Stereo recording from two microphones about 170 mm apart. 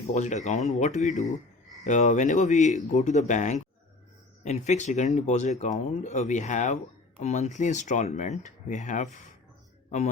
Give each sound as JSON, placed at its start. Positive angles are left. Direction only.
{"t": 0.1, "sound": "speech", "side_deg": 45}